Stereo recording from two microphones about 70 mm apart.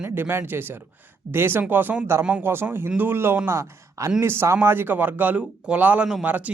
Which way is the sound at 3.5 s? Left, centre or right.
Right.